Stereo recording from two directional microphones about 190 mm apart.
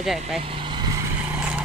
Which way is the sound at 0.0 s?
Centre (ahead or behind).